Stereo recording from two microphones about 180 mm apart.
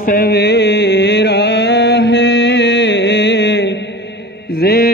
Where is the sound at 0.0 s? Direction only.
55° left (ahead or behind); by 3.8 s 75° left (ahead or behind).